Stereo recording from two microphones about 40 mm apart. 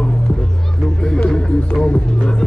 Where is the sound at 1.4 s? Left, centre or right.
Left.